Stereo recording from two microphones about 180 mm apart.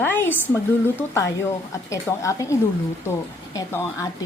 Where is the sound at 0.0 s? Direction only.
10° left (ahead or behind).